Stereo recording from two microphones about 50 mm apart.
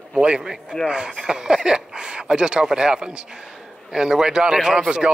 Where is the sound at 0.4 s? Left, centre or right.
Centre.